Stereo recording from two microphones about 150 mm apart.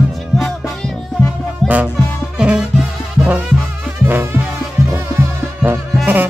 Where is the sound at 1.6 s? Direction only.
Centre (ahead or behind).